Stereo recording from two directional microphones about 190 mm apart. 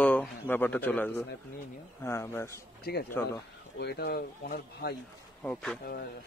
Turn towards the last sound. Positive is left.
turn(degrees=5)  # may be behind; listen again after turning